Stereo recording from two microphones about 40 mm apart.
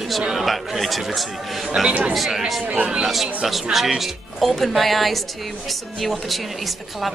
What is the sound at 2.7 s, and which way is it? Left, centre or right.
Speech, right.